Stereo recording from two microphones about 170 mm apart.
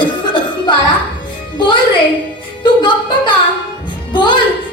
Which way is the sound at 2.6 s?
25° left (ahead or behind).